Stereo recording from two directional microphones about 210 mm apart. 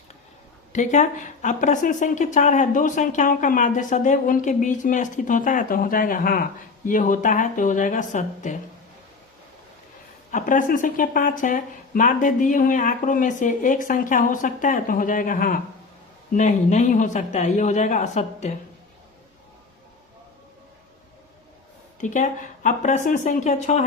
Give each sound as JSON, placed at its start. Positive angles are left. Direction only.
{"t": 0.7, "sound": "speech", "side_deg": 35}
{"t": 10.3, "sound": "speech", "side_deg": 40}
{"t": 22.0, "sound": "speech", "side_deg": 35}